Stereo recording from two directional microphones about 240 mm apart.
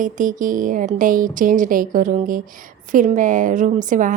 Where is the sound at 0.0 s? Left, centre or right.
Right.